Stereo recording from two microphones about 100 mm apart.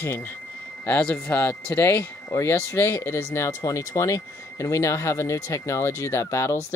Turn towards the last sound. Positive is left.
turn(degrees=30)  # may be behind; listen again after turning